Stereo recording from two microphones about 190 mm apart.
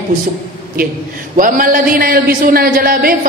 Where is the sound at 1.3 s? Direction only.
45° right (ahead or behind).